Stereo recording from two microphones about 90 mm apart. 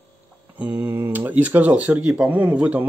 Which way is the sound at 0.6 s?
20° right (ahead or behind).